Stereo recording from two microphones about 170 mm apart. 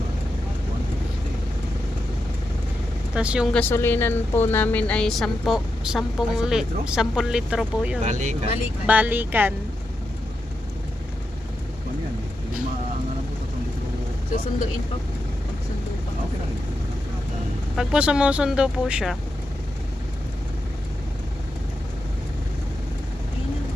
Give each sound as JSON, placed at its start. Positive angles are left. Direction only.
{"t": 3.2, "sound": "speech", "side_deg": -5}
{"t": 3.5, "sound": "a woman's voice", "side_deg": 10}
{"t": 8.0, "sound": "speech", "side_deg": -45}
{"t": 8.9, "sound": "speech", "side_deg": -10}
{"t": 17.7, "sound": "a woman's voice", "side_deg": -5}